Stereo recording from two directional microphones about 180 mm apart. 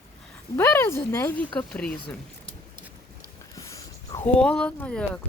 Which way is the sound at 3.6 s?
20° left (ahead or behind).